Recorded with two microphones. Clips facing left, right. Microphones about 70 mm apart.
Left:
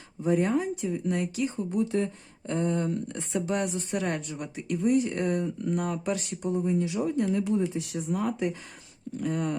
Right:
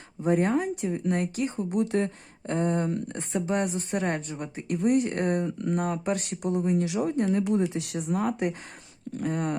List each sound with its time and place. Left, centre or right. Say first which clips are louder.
0.2 s speech: right 1 dB; right
2.5 s speech: right 1 dB; right
4.7 s speech: right 1 dB; right
7.5 s speech: right 1 dB; right